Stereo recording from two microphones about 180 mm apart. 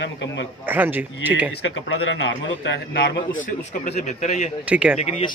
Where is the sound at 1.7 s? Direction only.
90° left.